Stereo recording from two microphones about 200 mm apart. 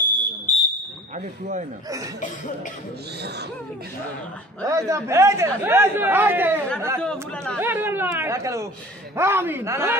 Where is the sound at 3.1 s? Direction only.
55° right (ahead or behind).